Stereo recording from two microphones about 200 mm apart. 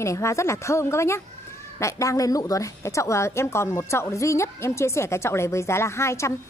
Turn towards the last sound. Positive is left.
turn(degrees=15)  # may be behind; listen again after turning